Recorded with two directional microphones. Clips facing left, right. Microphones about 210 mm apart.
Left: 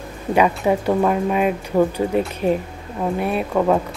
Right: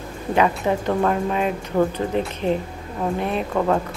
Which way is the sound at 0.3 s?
15° left (ahead or behind).